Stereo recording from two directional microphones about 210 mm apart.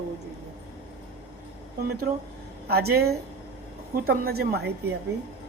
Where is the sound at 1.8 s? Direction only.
45° right (ahead or behind).